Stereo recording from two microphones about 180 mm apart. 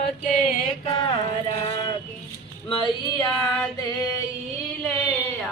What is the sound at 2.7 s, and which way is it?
Female singing, 25° left (ahead or behind).